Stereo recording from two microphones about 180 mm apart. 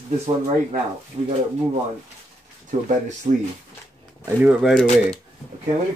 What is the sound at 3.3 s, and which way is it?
Speech, 35° right (ahead or behind).